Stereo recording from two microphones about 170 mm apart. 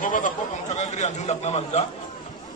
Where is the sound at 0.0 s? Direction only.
50° left (ahead or behind).